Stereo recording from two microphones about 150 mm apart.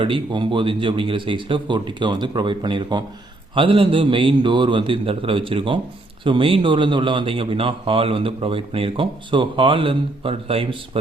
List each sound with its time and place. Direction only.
0.0 s speech: 35° right (ahead or behind)